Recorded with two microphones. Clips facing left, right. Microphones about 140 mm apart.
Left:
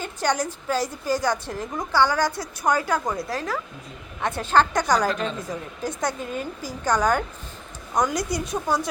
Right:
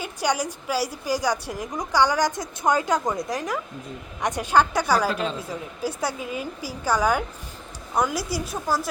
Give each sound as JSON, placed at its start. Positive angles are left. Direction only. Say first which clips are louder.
{"t": 0.0, "sound": "a woman's voice", "louder": "left 1 dB", "side_deg": -10}